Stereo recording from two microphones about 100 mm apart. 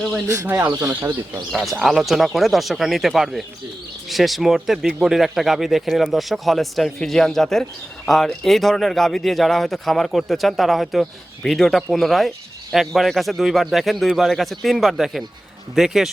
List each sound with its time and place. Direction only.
0.3 s speech: 25° right (ahead or behind)
1.8 s speech: centre (ahead or behind)